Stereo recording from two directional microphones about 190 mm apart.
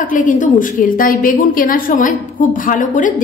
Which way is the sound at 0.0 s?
45° left (ahead or behind).